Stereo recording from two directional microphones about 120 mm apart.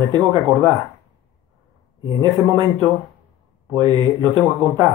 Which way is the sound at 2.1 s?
35° right (ahead or behind).